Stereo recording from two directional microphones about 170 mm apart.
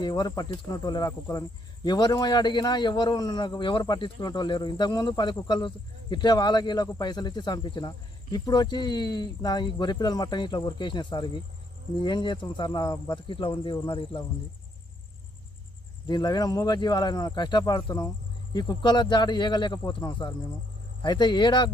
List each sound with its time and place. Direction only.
0.0 s speech: 25° left (ahead or behind)
16.0 s speech: 25° left (ahead or behind)